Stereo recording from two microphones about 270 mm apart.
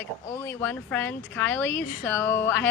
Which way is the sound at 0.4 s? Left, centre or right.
Centre.